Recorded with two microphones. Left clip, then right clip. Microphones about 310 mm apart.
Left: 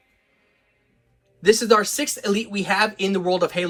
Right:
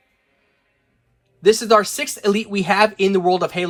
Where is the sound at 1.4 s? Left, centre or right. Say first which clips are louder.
Right 3 dB; centre.